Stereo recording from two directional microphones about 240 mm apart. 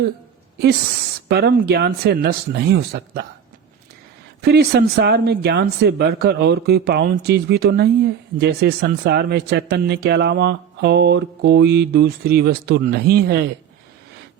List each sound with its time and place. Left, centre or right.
1.3 s speech: right
4.4 s speech: right